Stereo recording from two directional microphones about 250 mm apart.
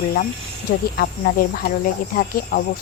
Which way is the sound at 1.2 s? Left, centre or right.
Left.